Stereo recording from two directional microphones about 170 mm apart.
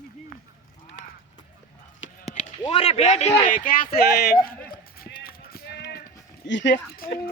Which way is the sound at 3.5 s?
55° left (ahead or behind).